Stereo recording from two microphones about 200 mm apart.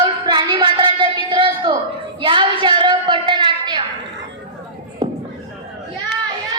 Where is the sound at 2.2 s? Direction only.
25° right (ahead or behind).